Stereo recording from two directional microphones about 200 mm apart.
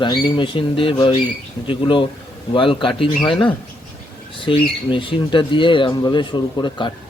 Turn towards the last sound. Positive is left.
turn(degrees=20)  # may be behind; listen again after turning